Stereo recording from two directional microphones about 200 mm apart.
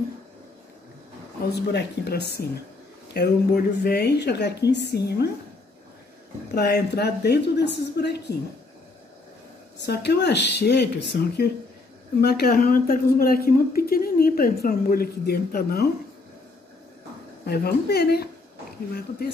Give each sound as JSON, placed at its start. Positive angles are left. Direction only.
{"t": 1.5, "sound": "a woman's voice", "side_deg": 55}
{"t": 6.5, "sound": "a woman's voice", "side_deg": 55}
{"t": 9.8, "sound": "a woman's voice", "side_deg": 60}
{"t": 17.5, "sound": "a woman's voice", "side_deg": 50}